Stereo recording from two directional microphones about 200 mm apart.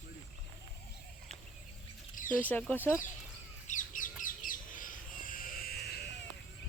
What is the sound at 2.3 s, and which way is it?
Speech, 10° left (ahead or behind).